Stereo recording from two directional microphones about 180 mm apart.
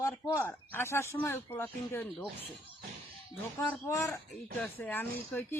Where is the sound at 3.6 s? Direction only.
15° left (ahead or behind).